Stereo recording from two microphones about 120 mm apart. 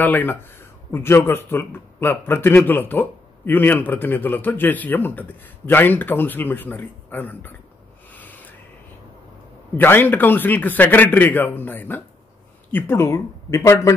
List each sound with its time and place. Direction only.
0.0 s speech: 15° left (ahead or behind)
8.1 s rub: 15° left (ahead or behind)
9.8 s speech: 15° left (ahead or behind)